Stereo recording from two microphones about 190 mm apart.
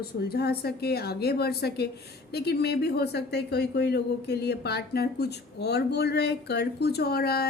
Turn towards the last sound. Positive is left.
turn(degrees=55)  # may be behind; listen again after turning